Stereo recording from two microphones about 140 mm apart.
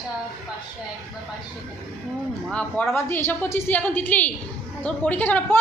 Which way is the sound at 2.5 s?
10° left (ahead or behind).